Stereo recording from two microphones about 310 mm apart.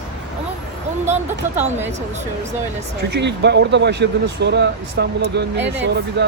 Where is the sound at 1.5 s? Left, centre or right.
Centre.